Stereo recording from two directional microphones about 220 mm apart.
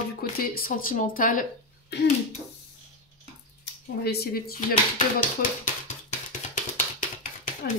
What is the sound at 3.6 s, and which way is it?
Speech, 45° left (ahead or behind).